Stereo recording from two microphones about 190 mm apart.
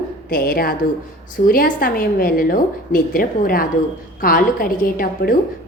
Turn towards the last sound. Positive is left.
turn(degrees=50)  # may be behind; listen again after turning